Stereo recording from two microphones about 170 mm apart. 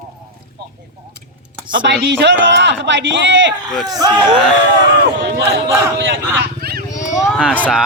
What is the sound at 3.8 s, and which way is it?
Speech, 25° right (ahead or behind).